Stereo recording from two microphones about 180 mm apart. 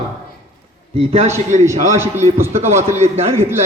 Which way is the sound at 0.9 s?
35° right (ahead or behind).